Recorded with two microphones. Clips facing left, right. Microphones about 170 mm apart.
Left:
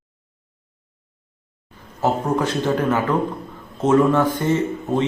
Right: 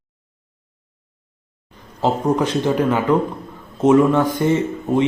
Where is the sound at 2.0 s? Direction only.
15° right (ahead or behind).